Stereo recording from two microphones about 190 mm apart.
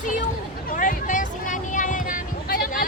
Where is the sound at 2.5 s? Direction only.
50° left (ahead or behind).